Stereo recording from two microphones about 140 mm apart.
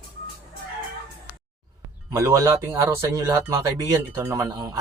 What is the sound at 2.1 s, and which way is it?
Speech, 20° right (ahead or behind).